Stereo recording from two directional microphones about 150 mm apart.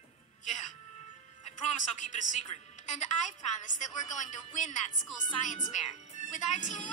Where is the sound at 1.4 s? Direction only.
55° left (ahead or behind).